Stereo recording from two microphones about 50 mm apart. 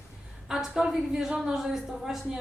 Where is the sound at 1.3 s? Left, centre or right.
Centre.